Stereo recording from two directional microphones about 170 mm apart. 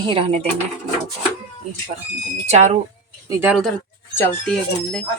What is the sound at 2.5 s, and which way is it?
Speech, 45° right (ahead or behind).